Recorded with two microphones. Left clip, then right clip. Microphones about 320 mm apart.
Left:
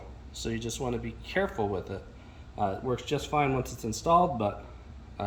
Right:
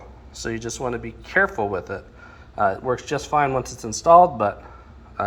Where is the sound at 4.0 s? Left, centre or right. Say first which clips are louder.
Right 11 dB; right.